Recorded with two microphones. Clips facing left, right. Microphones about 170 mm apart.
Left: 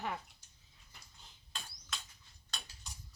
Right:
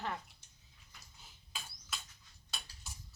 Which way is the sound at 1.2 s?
5° right (ahead or behind).